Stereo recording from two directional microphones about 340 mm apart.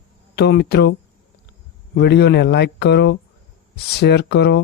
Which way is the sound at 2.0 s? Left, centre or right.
Left.